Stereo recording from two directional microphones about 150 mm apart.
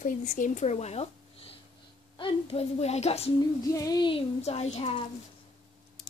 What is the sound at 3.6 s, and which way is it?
Speech, 25° left (ahead or behind).